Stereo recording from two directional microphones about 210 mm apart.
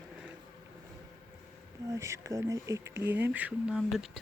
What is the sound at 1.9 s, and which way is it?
Speech, 15° right (ahead or behind).